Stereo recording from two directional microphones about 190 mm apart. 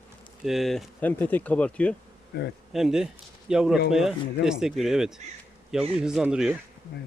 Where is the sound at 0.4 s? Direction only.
Centre (ahead or behind).